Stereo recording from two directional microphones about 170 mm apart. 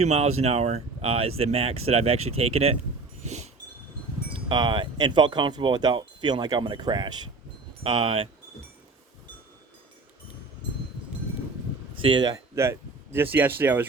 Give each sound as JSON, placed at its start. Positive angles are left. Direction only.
{"t": 0.0, "sound": "speech", "side_deg": -40}
{"t": 3.2, "sound": "a sound", "side_deg": -40}
{"t": 4.4, "sound": "speech", "side_deg": -25}
{"t": 12.0, "sound": "speech", "side_deg": -25}